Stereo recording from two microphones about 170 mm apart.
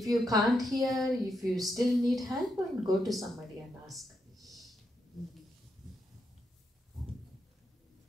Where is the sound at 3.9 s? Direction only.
Centre (ahead or behind).